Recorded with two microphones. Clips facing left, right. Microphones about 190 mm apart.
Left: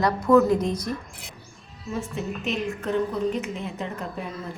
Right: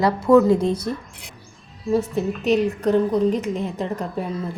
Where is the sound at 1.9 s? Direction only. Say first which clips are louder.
Right 9 dB; 35° right (ahead or behind).